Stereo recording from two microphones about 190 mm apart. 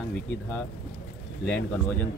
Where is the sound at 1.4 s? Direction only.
10° left (ahead or behind).